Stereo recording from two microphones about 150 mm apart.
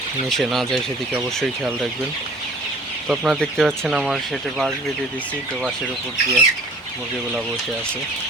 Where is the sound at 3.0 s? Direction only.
5° right (ahead or behind).